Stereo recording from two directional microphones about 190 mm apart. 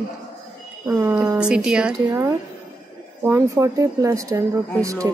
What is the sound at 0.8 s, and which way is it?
Speech, 10° right (ahead or behind).